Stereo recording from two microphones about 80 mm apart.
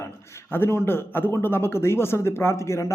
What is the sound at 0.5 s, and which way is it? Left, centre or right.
Speech, left.